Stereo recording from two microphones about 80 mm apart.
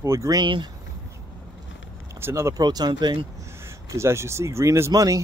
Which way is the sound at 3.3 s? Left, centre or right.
Right.